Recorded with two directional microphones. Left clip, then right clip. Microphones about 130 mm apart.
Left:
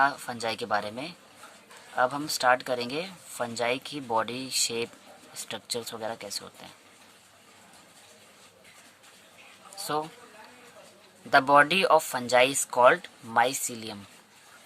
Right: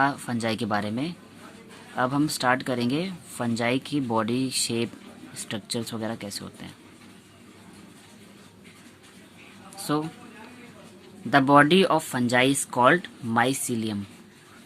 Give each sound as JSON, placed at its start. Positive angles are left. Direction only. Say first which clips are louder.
{"t": 0.0, "sound": "speech", "louder": "right 1 dB", "side_deg": 25}
{"t": 9.7, "sound": "a sound", "louder": "right 2 dB", "side_deg": 25}
{"t": 11.3, "sound": "speech", "louder": "right 2 dB", "side_deg": 35}